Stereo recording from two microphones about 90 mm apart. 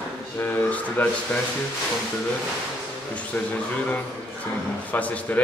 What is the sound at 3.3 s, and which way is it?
Speech, 15° left (ahead or behind).